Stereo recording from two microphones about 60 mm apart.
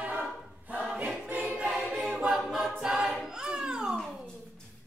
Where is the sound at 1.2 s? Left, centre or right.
Right.